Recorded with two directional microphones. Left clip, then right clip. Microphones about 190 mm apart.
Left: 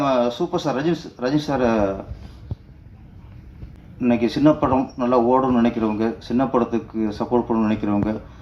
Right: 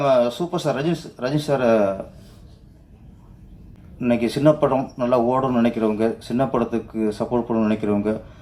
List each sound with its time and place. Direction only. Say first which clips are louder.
0.0 s speech: right 2 dB; 30° right (ahead or behind)
4.0 s speech: even; 30° right (ahead or behind)